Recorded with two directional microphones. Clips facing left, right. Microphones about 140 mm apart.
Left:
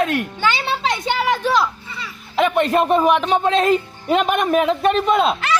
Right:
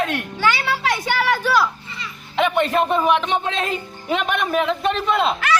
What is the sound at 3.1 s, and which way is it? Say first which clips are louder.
A man's voice: left 4 dB; 40° left (ahead or behind).